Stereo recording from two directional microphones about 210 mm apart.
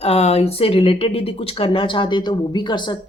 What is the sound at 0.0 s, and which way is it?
Speech, 30° left (ahead or behind).